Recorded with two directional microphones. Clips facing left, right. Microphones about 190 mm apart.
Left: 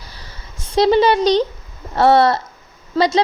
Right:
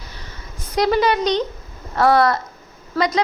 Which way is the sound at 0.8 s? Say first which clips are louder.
Left 4 dB; 30° left (ahead or behind).